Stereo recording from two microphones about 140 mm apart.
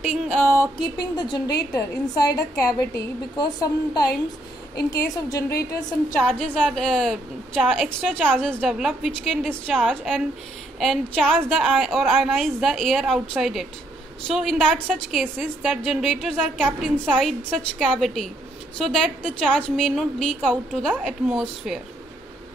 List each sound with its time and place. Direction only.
0.0 s a sound: 5° left (ahead or behind)
1.1 s a woman's voice: 30° left (ahead or behind)
6.1 s a woman's voice: 10° left (ahead or behind)